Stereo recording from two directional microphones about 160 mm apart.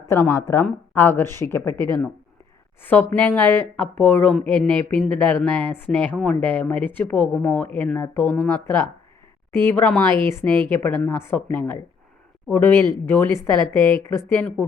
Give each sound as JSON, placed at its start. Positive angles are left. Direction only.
{"t": 0.1, "sound": "speech", "side_deg": 15}
{"t": 2.8, "sound": "speech", "side_deg": 10}